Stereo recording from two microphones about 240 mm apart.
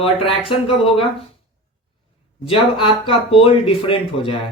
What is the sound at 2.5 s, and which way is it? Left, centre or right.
Speech, left.